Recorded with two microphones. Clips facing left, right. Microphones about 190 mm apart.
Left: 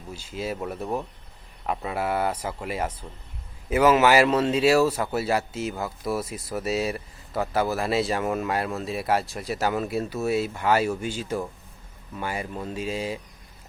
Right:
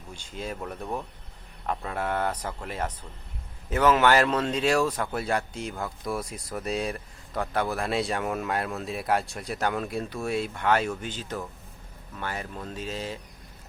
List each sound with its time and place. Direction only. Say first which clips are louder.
0.1 s speech: left 4 dB; 5° left (ahead or behind)